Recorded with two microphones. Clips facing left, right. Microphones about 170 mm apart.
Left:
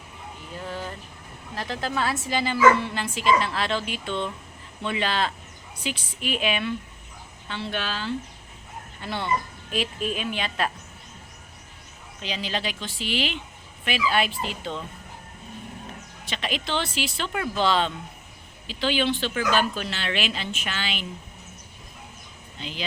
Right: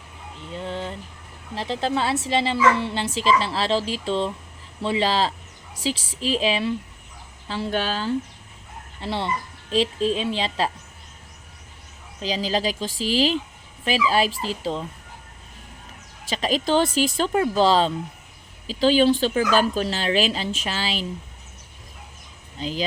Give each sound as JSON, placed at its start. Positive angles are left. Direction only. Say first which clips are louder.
{"t": 0.5, "sound": "a sound", "louder": "right 4 dB", "side_deg": -25}
{"t": 1.5, "sound": "speech", "louder": "right 4 dB", "side_deg": -25}
{"t": 5.7, "sound": "a woman's voice", "louder": "right 6 dB", "side_deg": -90}
{"t": 6.1, "sound": "speech", "louder": "right 3 dB", "side_deg": -30}
{"t": 9.0, "sound": "speech", "louder": "right 1 dB", "side_deg": -30}
{"t": 12.2, "sound": "speech", "louder": "right 6 dB", "side_deg": -35}
{"t": 16.3, "sound": "speech", "louder": "right 8 dB", "side_deg": -40}
{"t": 22.5, "sound": "speech", "louder": "right 7 dB", "side_deg": -40}